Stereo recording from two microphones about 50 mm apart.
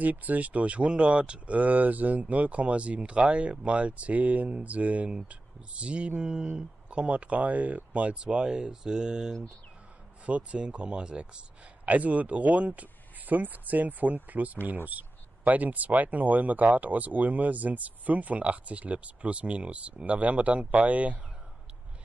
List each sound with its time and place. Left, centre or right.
0.0 s speech: right; by 9.4 s centre
10.2 s speech: right